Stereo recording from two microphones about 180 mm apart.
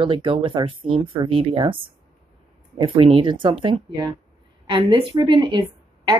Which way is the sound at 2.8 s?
30° right (ahead or behind).